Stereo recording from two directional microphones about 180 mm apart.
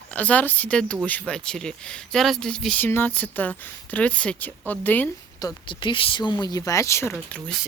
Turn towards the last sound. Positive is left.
turn(degrees=5)  # may be behind; listen again after turning